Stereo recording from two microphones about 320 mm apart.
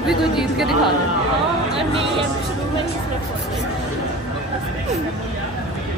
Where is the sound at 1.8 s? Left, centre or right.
Centre.